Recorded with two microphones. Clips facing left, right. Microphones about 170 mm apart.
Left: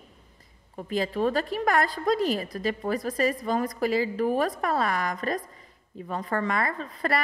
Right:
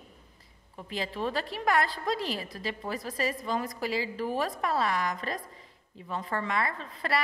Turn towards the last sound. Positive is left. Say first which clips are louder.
# left 4 dB
turn(degrees=50)  # may be behind; listen again after turning